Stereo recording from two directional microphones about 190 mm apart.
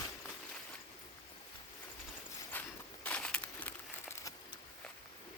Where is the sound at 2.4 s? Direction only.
10° left (ahead or behind).